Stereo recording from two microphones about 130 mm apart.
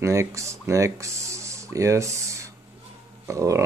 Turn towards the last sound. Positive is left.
turn(degrees=-25)  # may be behind; listen again after turning